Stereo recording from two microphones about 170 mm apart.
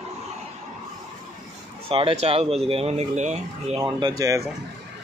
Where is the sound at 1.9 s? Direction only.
35° right (ahead or behind).